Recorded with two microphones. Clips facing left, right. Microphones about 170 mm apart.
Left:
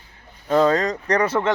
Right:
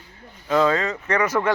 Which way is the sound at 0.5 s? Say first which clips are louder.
Left 2 dB; 40° left (ahead or behind).